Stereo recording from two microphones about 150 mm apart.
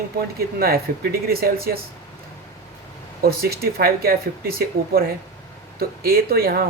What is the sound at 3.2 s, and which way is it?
Speech, 90° right.